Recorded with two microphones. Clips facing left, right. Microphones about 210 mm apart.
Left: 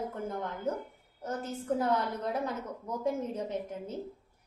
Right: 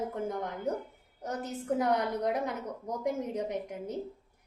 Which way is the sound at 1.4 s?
15° right (ahead or behind).